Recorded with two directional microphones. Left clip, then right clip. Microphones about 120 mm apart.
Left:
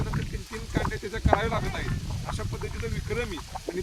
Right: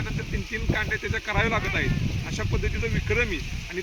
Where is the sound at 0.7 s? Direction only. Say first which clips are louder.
Right 4 dB; 15° left (ahead or behind).